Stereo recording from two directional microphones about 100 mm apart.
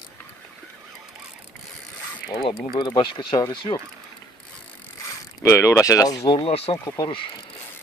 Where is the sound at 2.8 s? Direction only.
50° left (ahead or behind).